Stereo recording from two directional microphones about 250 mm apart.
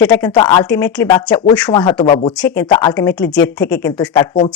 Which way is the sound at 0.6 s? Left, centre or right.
Centre.